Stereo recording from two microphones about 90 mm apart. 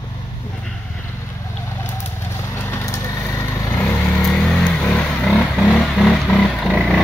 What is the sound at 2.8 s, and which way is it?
Vehicle, 35° left (ahead or behind).